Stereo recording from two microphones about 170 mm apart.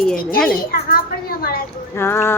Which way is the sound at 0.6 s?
60° left (ahead or behind).